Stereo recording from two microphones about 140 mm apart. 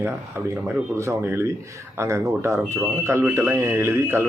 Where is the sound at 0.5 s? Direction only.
20° right (ahead or behind).